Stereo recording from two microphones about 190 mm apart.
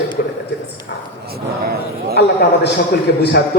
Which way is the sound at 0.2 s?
50° left (ahead or behind).